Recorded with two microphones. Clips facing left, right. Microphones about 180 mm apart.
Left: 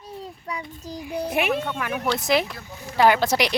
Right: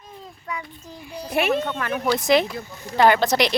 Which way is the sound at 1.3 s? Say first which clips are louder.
Right 4 dB; 10° left (ahead or behind).